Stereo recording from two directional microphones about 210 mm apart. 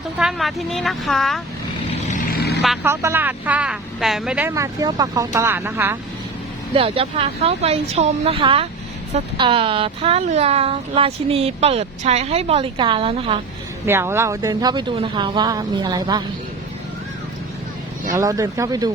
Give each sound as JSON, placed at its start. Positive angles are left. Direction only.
{"t": 0.2, "sound": "speech", "side_deg": 0}
{"t": 1.9, "sound": "vehicle", "side_deg": 35}
{"t": 2.8, "sound": "speech", "side_deg": -10}
{"t": 6.7, "sound": "a child's voice", "side_deg": -25}
{"t": 13.8, "sound": "a child's voice", "side_deg": -10}
{"t": 18.1, "sound": "speech", "side_deg": -15}